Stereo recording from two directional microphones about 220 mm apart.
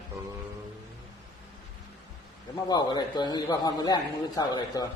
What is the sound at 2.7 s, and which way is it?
A man's voice, 20° left (ahead or behind).